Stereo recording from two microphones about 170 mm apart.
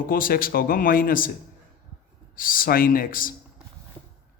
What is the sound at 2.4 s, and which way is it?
Speech, 55° left (ahead or behind).